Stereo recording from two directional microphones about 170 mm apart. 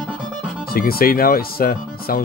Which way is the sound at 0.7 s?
60° left (ahead or behind).